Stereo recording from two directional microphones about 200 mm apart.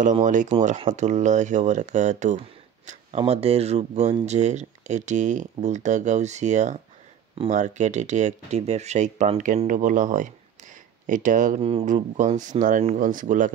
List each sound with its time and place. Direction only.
0.0 s speech: 40° right (ahead or behind)